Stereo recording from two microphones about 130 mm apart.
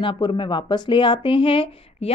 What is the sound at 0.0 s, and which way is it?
A woman's voice, 40° left (ahead or behind).